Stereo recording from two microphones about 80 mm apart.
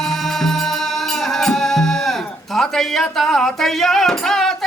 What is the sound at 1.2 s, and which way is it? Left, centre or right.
Music, centre.